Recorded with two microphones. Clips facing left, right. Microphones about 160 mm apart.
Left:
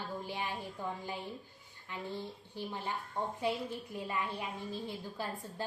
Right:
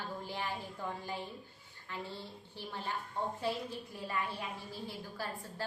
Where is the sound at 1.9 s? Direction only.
15° left (ahead or behind).